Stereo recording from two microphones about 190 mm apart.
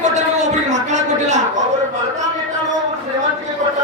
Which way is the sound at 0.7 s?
40° right (ahead or behind).